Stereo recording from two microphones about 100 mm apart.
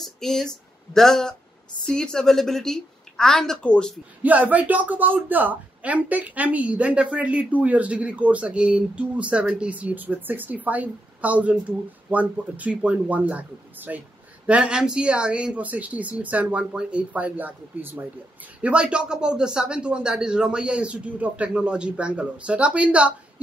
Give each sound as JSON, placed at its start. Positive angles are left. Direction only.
{"t": 0.0, "sound": "a woman's voice", "side_deg": 5}
{"t": 4.2, "sound": "speech", "side_deg": -15}